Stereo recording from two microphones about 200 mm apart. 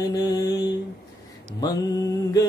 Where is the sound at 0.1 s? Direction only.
20° left (ahead or behind).